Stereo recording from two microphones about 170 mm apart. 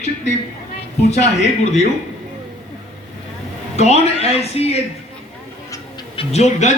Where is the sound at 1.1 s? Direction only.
40° left (ahead or behind).